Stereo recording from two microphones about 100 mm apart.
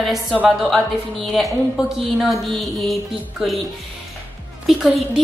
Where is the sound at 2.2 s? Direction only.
Centre (ahead or behind).